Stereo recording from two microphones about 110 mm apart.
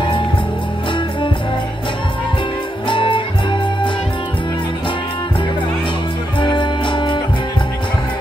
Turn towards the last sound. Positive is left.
turn(degrees=45)  # may be behind; listen again after turning